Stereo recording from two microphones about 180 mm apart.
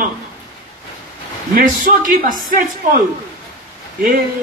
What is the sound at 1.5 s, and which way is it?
Speech, 50° right (ahead or behind).